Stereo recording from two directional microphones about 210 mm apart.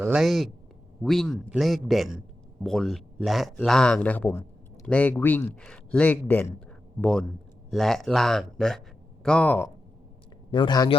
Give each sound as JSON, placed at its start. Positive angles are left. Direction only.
{"t": 0.0, "sound": "a man's voice", "side_deg": -5}
{"t": 10.5, "sound": "speech", "side_deg": 20}